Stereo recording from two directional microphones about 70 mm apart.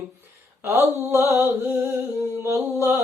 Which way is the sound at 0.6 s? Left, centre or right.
Right.